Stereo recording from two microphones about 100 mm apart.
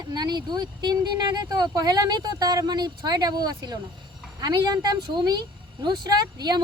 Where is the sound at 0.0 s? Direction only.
45° right (ahead or behind).